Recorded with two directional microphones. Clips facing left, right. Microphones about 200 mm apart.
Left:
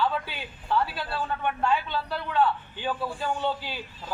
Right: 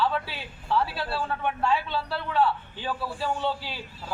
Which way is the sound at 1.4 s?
5° right (ahead or behind).